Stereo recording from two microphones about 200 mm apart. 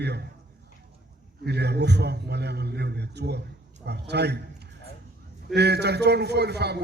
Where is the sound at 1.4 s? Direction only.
55° right (ahead or behind).